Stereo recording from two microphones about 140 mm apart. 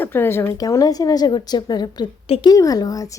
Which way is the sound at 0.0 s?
15° left (ahead or behind).